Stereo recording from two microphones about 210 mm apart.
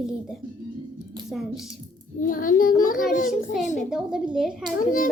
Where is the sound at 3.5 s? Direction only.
Centre (ahead or behind).